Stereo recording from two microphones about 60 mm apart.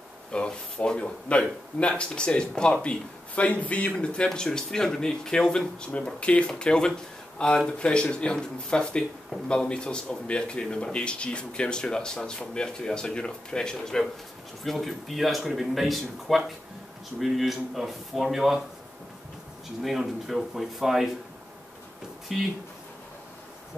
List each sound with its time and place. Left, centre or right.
0.3 s speech: centre
19.8 s speech: centre
22.3 s speech: centre